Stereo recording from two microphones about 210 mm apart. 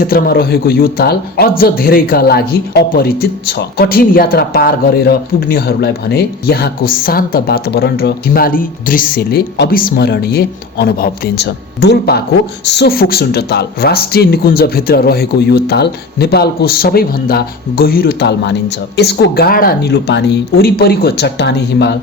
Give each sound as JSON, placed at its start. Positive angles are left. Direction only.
{"t": 0.0, "sound": "speech", "side_deg": 45}